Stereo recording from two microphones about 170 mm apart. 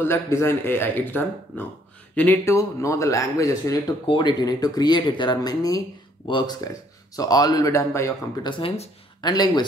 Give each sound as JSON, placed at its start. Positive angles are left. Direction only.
{"t": 0.0, "sound": "a man's voice", "side_deg": 15}
{"t": 8.5, "sound": "a man's voice", "side_deg": 30}